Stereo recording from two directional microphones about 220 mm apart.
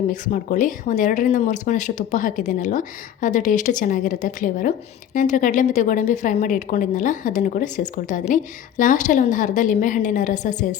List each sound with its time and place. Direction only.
0.1 s speech: 35° left (ahead or behind)